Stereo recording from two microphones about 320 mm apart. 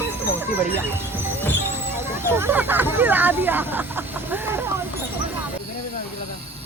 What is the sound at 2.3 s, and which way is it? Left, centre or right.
Speech, centre.